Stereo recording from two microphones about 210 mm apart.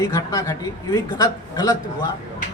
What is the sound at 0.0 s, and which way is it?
Speech, 15° left (ahead or behind).